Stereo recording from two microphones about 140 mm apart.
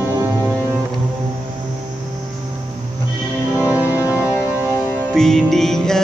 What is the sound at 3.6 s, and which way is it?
Music, 15° right (ahead or behind).